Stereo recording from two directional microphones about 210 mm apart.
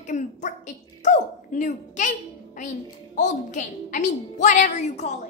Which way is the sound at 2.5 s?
35° left (ahead or behind).